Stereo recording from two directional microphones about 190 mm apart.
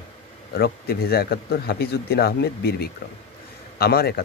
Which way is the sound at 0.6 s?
55° left (ahead or behind).